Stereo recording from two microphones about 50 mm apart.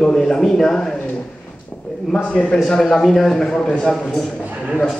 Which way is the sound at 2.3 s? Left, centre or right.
Centre.